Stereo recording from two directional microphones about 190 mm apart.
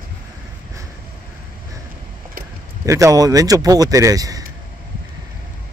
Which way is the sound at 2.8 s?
15° right (ahead or behind).